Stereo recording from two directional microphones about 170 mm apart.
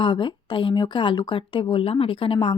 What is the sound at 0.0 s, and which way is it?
Speech, 25° left (ahead or behind).